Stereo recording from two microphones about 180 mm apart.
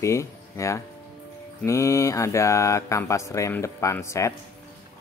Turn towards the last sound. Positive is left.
turn(degrees=15)  # may be behind; listen again after turning